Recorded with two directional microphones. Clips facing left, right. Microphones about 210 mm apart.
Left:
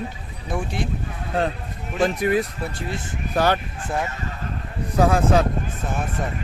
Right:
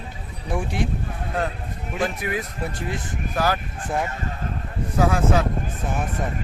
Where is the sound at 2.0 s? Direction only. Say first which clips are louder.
Left 7 dB; 35° left (ahead or behind).